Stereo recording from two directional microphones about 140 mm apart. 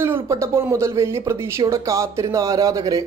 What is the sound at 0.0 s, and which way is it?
A man's voice, 20° right (ahead or behind).